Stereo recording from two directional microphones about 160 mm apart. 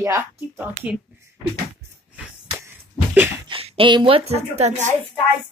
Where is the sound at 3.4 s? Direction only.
35° right (ahead or behind).